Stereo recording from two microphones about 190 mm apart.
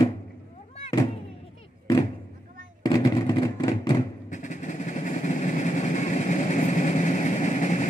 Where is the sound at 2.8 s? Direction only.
20° left (ahead or behind).